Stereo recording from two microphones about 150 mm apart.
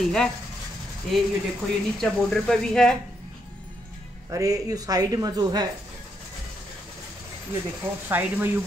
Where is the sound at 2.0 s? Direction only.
Centre (ahead or behind).